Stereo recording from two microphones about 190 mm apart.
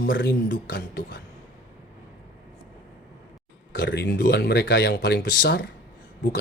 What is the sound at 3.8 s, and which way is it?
Speech, 70° left (ahead or behind).